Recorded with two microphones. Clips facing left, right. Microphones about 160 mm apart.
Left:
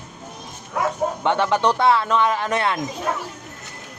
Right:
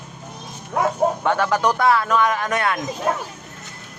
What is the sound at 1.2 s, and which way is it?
Speech, 25° left (ahead or behind).